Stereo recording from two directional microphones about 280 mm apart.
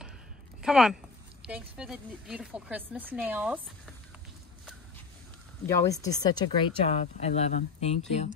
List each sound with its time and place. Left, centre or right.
0.6 s speech: centre
5.7 s speech: centre